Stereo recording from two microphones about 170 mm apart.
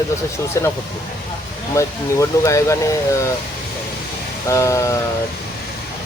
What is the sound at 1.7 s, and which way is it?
Speech, 20° left (ahead or behind).